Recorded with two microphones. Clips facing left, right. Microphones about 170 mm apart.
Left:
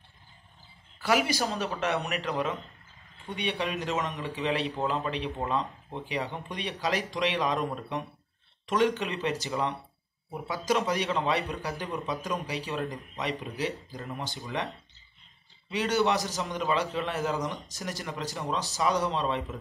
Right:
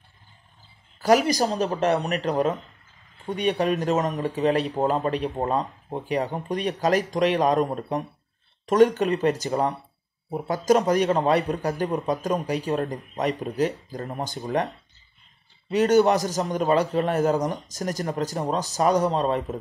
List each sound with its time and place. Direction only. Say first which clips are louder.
0.9 s a man's voice: right 7 dB; 40° right (ahead or behind)
15.7 s a man's voice: right 8 dB; 45° right (ahead or behind)